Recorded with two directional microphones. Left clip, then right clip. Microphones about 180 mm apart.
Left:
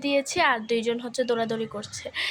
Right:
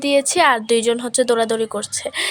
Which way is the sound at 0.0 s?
45° right (ahead or behind).